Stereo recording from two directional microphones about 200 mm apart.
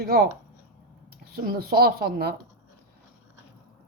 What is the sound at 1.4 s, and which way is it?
Speech, 50° right (ahead or behind).